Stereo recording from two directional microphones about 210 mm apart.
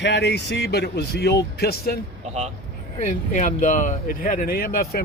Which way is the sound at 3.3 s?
40° left (ahead or behind).